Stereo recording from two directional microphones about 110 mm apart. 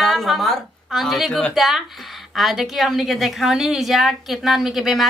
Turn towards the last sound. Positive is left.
turn(degrees=0)  # may be behind; listen again after turning